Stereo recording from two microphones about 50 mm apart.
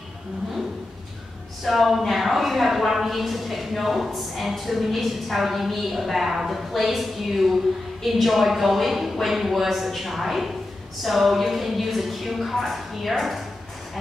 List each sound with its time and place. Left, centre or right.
1.6 s a woman's voice: centre